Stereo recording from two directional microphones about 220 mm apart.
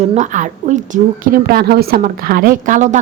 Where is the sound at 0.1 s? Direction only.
35° right (ahead or behind).